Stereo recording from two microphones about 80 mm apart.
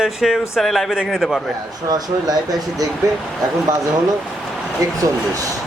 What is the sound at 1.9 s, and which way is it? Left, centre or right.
Speech, right.